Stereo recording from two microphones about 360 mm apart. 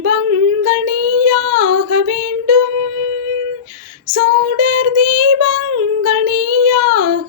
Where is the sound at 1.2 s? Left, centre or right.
Right.